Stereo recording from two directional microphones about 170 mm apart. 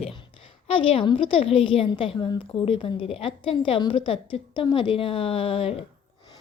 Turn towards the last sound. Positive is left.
turn(degrees=35)  # may be behind; listen again after turning